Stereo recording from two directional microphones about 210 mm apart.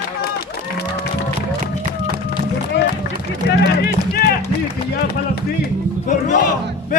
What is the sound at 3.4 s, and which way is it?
Music, 50° left (ahead or behind).